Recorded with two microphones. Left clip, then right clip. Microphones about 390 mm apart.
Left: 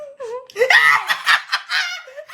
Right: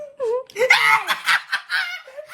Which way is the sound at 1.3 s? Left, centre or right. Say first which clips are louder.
Left 3 dB; centre.